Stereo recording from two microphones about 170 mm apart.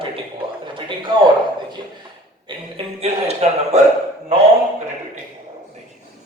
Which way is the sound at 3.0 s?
40° right (ahead or behind).